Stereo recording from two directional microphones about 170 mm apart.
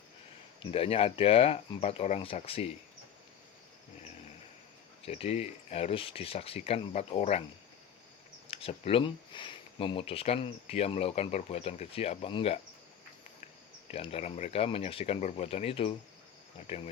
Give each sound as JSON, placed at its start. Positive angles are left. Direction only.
{"t": 0.6, "sound": "speech", "side_deg": 35}
{"t": 5.0, "sound": "speech", "side_deg": 35}
{"t": 8.4, "sound": "speech", "side_deg": 35}
{"t": 13.9, "sound": "speech", "side_deg": 35}